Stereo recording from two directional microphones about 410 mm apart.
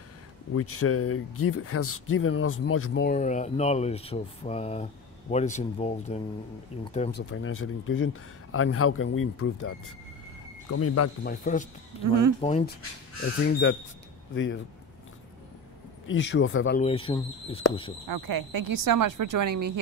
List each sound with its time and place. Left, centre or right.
0.5 s speech: left
11.2 s speech: centre
13.2 s speech: left
16.1 s speech: left
16.8 s speech: centre
18.0 s speech: right